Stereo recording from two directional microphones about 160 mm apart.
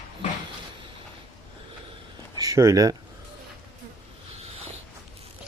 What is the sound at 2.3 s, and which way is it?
Speech, 20° right (ahead or behind).